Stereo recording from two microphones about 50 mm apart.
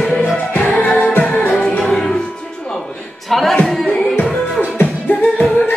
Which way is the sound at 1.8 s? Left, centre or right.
Centre.